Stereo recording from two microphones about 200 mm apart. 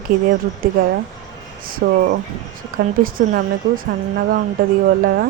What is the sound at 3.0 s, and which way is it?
Speech, 45° right (ahead or behind).